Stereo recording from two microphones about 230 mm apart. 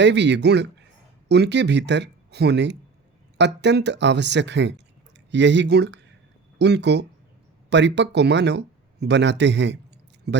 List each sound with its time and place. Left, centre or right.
0.0 s speech: right